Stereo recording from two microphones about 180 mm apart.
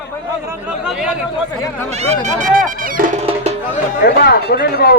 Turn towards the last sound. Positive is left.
turn(degrees=60)  # may be behind; listen again after turning